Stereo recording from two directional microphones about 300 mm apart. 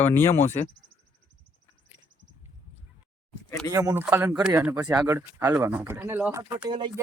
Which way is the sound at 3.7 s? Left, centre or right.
Centre.